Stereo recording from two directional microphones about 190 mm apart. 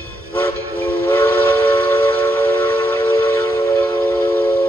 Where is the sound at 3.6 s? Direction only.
15° left (ahead or behind).